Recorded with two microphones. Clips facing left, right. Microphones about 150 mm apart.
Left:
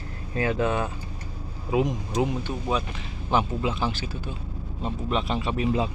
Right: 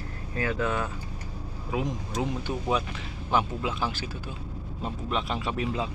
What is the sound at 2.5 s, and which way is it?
Speech, 10° right (ahead or behind).